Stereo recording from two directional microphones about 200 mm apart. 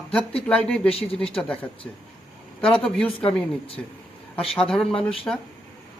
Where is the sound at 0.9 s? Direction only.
30° left (ahead or behind).